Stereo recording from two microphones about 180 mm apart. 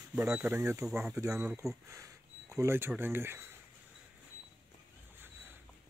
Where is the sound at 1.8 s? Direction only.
15° right (ahead or behind).